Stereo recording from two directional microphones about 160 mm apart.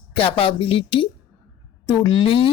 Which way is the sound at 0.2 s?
35° left (ahead or behind).